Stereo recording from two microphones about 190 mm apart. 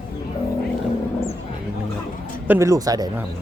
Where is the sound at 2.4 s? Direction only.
15° right (ahead or behind).